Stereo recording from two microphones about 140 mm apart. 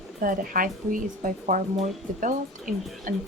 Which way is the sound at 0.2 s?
80° right.